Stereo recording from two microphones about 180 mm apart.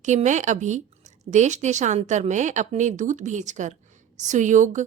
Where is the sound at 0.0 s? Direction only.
40° right (ahead or behind).